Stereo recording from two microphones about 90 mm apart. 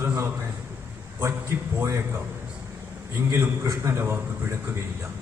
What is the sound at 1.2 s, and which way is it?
Speech, 30° right (ahead or behind).